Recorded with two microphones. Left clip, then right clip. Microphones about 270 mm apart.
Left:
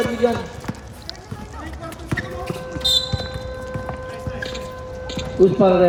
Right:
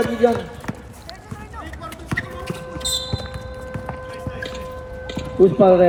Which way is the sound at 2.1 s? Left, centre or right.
Centre.